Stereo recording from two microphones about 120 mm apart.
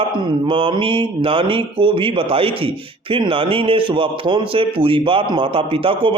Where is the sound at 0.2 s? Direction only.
45° right (ahead or behind).